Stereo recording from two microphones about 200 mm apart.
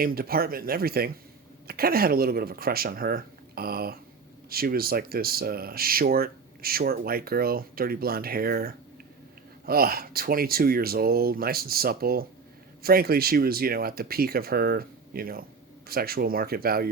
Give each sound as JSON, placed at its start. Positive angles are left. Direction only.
{"t": 0.0, "sound": "speech", "side_deg": -50}